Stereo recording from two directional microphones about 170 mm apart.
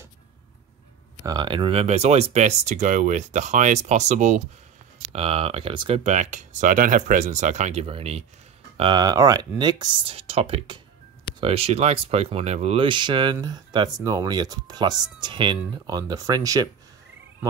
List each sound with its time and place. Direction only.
1.2 s speech: 25° right (ahead or behind)
6.0 s speech: 45° right (ahead or behind); by 16.6 s 20° right (ahead or behind)